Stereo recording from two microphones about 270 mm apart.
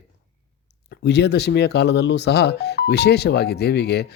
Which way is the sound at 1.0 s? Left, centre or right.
Left.